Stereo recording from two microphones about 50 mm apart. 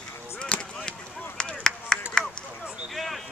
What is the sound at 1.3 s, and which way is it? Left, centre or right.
Chop, centre.